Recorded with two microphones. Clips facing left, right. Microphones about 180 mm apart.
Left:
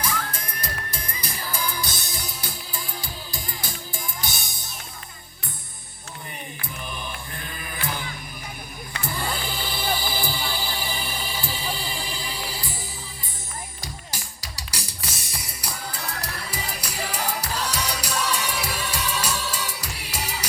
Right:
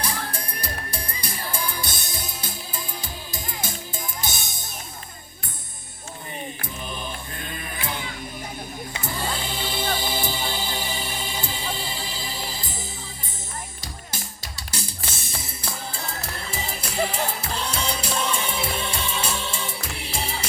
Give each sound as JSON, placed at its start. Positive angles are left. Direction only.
{"t": 0.0, "sound": "music", "side_deg": -30}
{"t": 8.9, "sound": "music", "side_deg": -25}
{"t": 14.4, "sound": "music", "side_deg": -25}